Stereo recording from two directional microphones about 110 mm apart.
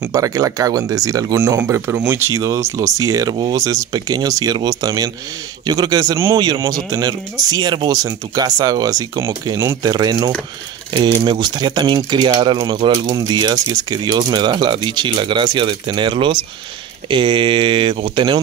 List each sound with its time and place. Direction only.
0.1 s speech: 30° right (ahead or behind)